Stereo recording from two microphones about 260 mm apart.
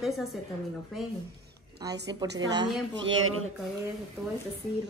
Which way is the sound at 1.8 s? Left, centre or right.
Centre.